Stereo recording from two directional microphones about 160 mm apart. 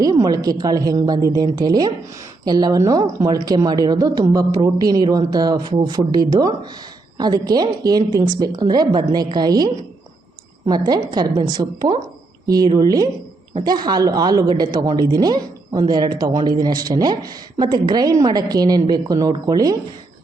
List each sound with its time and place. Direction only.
0.0 s speech: 20° right (ahead or behind)